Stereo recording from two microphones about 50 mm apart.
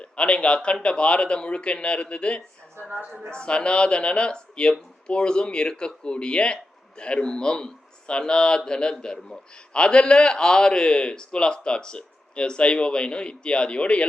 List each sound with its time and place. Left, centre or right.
0.0 s speech: left